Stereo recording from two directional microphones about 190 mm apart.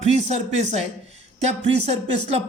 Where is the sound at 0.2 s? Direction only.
35° right (ahead or behind).